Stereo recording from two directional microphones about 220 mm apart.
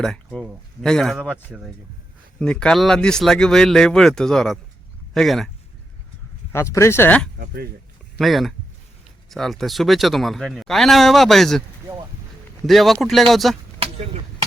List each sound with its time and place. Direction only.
0.0 s speech: 5° left (ahead or behind)
6.5 s speech: 10° left (ahead or behind)
7.3 s speech: 45° right (ahead or behind)
8.2 s speech: centre (ahead or behind)
12.6 s speech: centre (ahead or behind)
13.7 s a sound: 25° right (ahead or behind)